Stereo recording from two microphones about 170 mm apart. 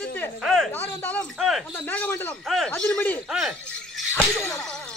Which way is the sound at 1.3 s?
Centre (ahead or behind).